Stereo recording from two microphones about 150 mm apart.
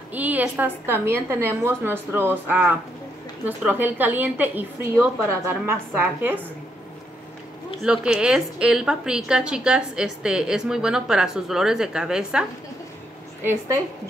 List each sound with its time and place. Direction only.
0.1 s a woman's voice: 10° right (ahead or behind)
7.8 s a woman's voice: 5° right (ahead or behind)